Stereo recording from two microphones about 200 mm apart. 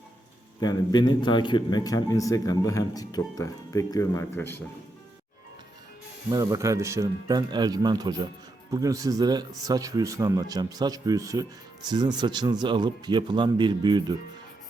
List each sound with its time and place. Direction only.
0.6 s a man's voice: 20° left (ahead or behind)
6.3 s speech: 15° right (ahead or behind)